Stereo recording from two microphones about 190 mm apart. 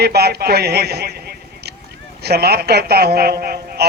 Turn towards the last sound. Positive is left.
turn(degrees=-55)  # may be behind; listen again after turning